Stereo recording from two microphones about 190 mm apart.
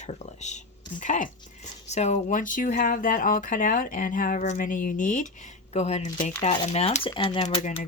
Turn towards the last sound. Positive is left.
turn(degrees=30)  # may be behind; listen again after turning